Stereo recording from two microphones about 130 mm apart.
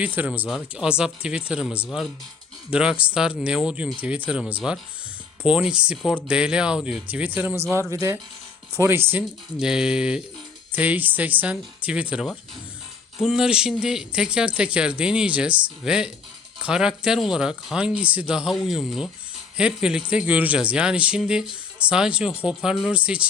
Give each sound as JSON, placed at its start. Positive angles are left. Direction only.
{"t": 0.0, "sound": "speech", "side_deg": -10}
{"t": 9.6, "sound": "speech", "side_deg": -5}